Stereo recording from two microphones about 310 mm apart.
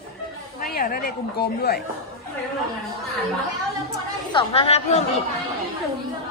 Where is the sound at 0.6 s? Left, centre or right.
Left.